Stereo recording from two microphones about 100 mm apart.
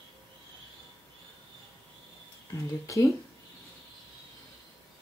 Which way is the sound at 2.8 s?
30° left (ahead or behind).